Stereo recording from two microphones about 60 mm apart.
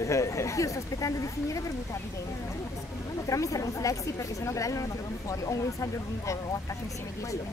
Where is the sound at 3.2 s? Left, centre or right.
Left.